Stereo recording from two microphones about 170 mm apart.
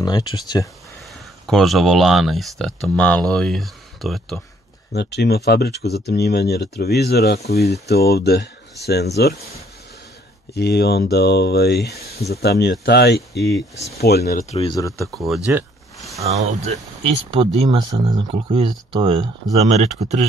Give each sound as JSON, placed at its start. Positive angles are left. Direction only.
{"t": 0.0, "sound": "speech", "side_deg": 25}
{"t": 1.4, "sound": "speech", "side_deg": 0}
{"t": 4.9, "sound": "speech", "side_deg": 75}
{"t": 10.5, "sound": "speech", "side_deg": 75}
{"t": 14.4, "sound": "speech", "side_deg": 40}
{"t": 14.7, "sound": "speech", "side_deg": 20}
{"t": 15.2, "sound": "speech", "side_deg": 0}
{"t": 16.3, "sound": "speech", "side_deg": -40}
{"t": 17.6, "sound": "speech", "side_deg": -25}